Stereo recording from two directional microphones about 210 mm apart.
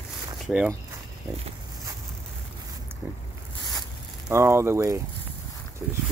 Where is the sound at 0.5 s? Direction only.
5° right (ahead or behind).